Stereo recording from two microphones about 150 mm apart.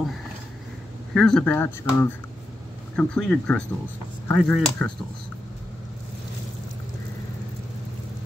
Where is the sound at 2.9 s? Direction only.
5° left (ahead or behind).